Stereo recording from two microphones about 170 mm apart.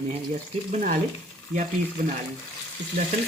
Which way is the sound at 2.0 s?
50° right (ahead or behind).